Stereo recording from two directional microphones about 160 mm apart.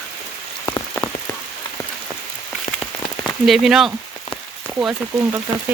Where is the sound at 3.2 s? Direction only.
Centre (ahead or behind).